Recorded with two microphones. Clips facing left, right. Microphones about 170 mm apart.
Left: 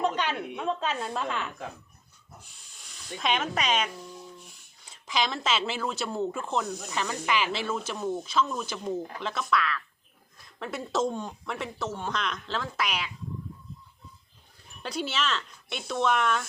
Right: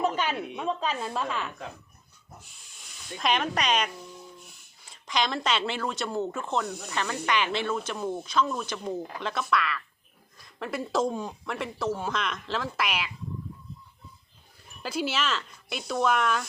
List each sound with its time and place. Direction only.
0.0 s a woman's voice: 5° right (ahead or behind)
3.2 s speech: centre (ahead or behind)
4.9 s speech: 5° left (ahead or behind)
7.9 s speech: 10° right (ahead or behind)
8.2 s speech: 5° left (ahead or behind)
14.8 s speech: 5° right (ahead or behind)